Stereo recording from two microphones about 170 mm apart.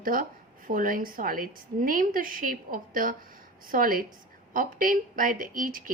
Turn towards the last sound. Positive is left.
turn(degrees=-55)  # may be behind; listen again after turning